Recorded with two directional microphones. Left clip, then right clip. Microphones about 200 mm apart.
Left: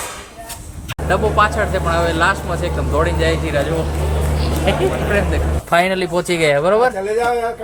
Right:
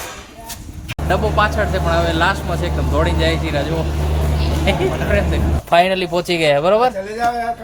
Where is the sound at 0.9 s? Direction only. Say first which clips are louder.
Left 1 dB; centre (ahead or behind).